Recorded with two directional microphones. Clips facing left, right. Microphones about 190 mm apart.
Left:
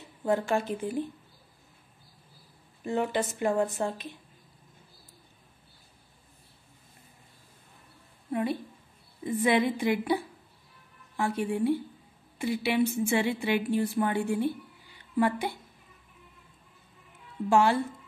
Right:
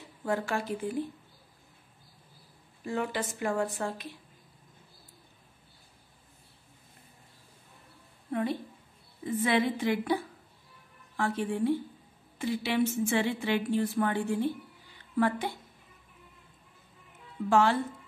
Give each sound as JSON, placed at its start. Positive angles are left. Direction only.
{"t": 0.2, "sound": "speech", "side_deg": 20}
{"t": 2.8, "sound": "speech", "side_deg": 20}
{"t": 8.3, "sound": "a woman's voice", "side_deg": 10}
{"t": 17.5, "sound": "speech", "side_deg": 10}